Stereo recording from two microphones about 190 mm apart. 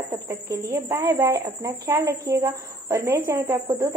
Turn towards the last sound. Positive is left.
turn(degrees=-15)  # may be behind; listen again after turning